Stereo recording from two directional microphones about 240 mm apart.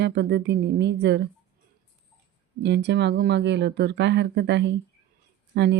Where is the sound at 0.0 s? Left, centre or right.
Right.